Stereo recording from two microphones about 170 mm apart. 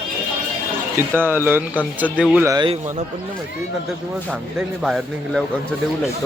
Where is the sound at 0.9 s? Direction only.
10° right (ahead or behind).